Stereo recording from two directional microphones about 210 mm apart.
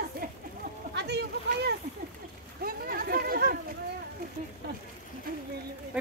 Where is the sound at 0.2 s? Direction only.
40° right (ahead or behind).